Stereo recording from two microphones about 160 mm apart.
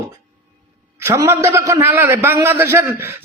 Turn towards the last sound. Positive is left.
turn(degrees=-15)  # may be behind; listen again after turning